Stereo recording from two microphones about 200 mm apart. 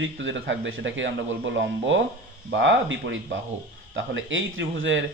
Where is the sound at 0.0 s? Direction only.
65° right (ahead or behind).